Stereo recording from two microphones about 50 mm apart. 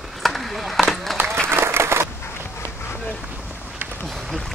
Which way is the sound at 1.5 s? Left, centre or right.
Right.